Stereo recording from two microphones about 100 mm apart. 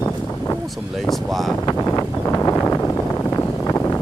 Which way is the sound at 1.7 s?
30° left (ahead or behind).